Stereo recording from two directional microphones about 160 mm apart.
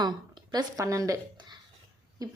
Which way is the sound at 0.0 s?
25° right (ahead or behind).